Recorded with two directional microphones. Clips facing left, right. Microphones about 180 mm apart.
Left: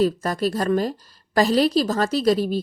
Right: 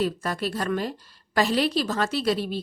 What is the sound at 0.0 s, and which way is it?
A woman's voice, 40° left (ahead or behind).